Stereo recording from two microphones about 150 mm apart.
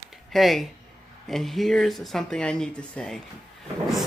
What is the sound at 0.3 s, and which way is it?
Speech, centre (ahead or behind).